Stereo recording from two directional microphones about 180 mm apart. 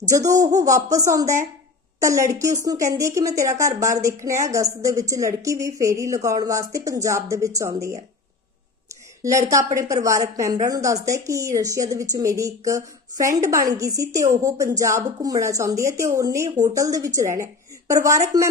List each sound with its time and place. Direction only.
0.0 s a woman's voice: 20° right (ahead or behind)
9.2 s a woman's voice: 20° right (ahead or behind)